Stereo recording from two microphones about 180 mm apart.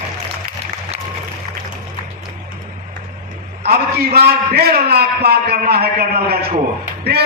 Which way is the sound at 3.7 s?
60° right (ahead or behind).